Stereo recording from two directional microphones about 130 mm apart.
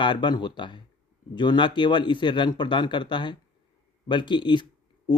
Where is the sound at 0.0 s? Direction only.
35° left (ahead or behind).